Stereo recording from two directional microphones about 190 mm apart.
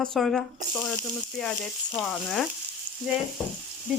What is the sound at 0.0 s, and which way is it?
Speech, centre (ahead or behind).